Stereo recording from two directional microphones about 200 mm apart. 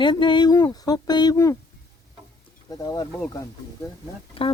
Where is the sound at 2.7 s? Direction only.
15° left (ahead or behind).